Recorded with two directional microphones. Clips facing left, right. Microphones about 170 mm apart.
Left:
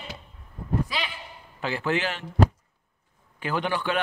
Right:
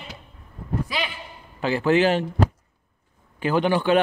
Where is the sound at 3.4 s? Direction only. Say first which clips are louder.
Right 7 dB; 30° right (ahead or behind).